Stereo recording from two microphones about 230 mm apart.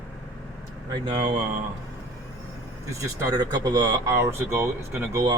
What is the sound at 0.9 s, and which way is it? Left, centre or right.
Speech, right.